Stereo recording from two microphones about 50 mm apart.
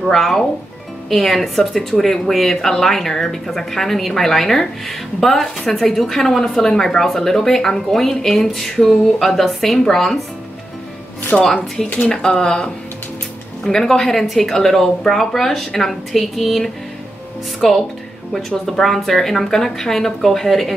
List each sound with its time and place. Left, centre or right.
0.0 s a woman's voice: centre
11.3 s a woman's voice: centre